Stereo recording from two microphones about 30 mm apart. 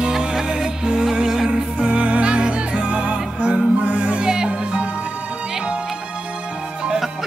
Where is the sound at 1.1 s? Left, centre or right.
Centre.